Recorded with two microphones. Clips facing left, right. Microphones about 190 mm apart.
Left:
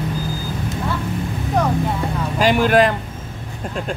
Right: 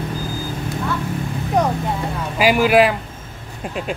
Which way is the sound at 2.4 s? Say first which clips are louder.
Right 1 dB; 10° right (ahead or behind).